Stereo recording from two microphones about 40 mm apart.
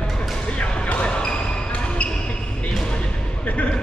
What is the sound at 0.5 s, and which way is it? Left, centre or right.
Basketball bounce, left.